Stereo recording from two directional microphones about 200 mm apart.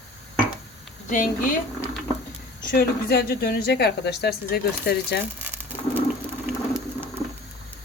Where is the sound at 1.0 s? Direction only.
40° left (ahead or behind).